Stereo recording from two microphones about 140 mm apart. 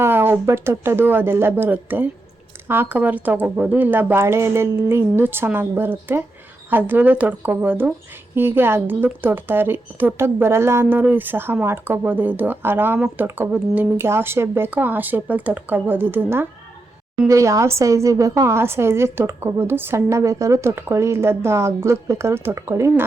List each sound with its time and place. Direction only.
0.0 s a woman's voice: 15° right (ahead or behind)